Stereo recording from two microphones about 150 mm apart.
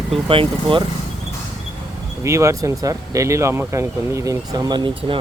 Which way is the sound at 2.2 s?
20° right (ahead or behind).